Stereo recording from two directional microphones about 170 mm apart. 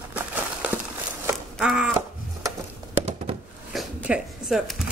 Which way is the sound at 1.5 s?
5° right (ahead or behind).